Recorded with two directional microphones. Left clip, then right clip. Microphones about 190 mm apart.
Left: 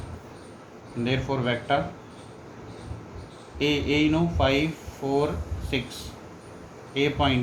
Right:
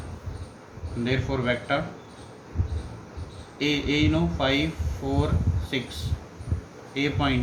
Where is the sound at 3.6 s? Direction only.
15° left (ahead or behind).